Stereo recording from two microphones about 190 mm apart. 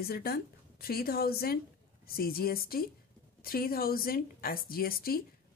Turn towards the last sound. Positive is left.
turn(degrees=50)  # may be behind; listen again after turning